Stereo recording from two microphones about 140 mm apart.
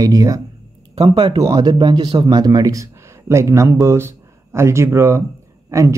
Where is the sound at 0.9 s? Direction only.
45° right (ahead or behind).